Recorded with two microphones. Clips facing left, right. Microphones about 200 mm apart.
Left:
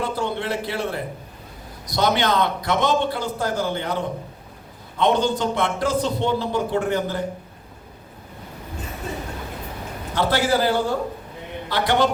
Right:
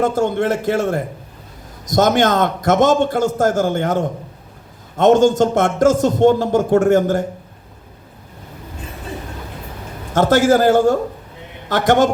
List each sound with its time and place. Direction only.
0.0 s a man's voice: 45° right (ahead or behind)
10.1 s a man's voice: 45° right (ahead or behind)